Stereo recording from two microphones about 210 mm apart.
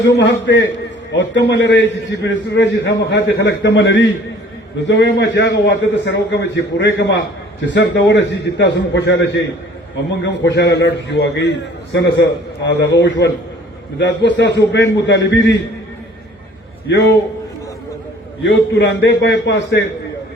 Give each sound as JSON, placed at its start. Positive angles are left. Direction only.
{"t": 0.2, "sound": "a man's voice", "side_deg": 55}
{"t": 16.9, "sound": "a man's voice", "side_deg": 55}
{"t": 18.4, "sound": "a man's voice", "side_deg": 60}